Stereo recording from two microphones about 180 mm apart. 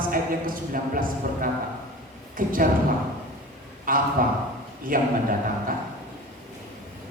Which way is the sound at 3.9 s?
50° right (ahead or behind).